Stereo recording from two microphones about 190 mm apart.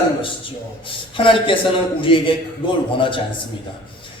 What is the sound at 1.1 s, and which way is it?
A man's voice, 25° left (ahead or behind).